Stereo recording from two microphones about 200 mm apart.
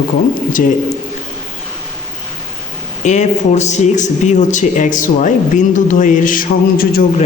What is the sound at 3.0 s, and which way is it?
A man's voice, 35° left (ahead or behind).